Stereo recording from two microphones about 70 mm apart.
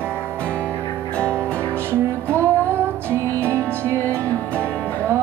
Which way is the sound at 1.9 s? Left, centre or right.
Right.